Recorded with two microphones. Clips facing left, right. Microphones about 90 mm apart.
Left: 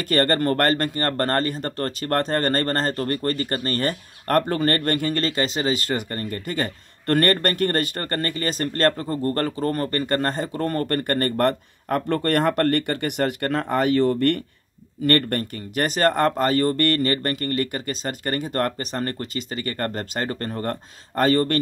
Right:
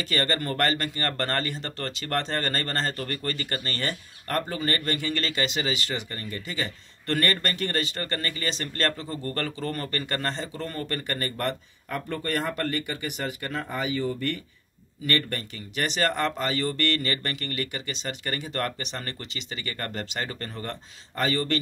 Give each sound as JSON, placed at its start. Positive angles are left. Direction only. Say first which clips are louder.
{"t": 0.0, "sound": "speech", "louder": "left 7 dB", "side_deg": 50}
{"t": 15.0, "sound": "speech", "louder": "left 8 dB", "side_deg": 50}